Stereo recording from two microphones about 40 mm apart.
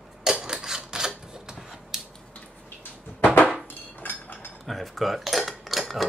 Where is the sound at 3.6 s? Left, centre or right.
Left.